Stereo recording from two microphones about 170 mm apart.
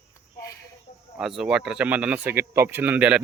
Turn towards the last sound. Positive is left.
turn(degrees=-5)  # may be behind; listen again after turning